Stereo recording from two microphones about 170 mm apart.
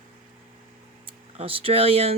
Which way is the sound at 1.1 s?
35° right (ahead or behind).